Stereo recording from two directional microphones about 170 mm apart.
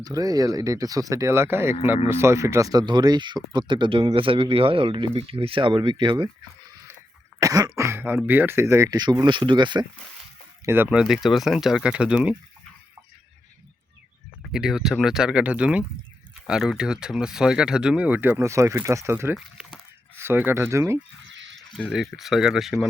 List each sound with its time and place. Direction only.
0.0 s speech: 20° right (ahead or behind)
7.3 s speech: 20° right (ahead or behind)
10.7 s speech: 10° right (ahead or behind)
14.5 s speech: 5° right (ahead or behind)
19.4 s speech: centre (ahead or behind)
20.1 s speech: 15° right (ahead or behind)
21.2 s a sound: 90° right
21.5 s speech: 5° left (ahead or behind)